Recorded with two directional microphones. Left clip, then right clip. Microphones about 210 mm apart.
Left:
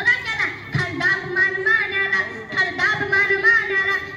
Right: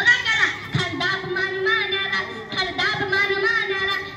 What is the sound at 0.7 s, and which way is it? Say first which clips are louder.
Music: left 3 dB; 10° left (ahead or behind).